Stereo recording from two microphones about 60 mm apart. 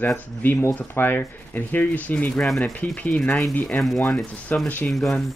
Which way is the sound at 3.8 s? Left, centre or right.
Centre.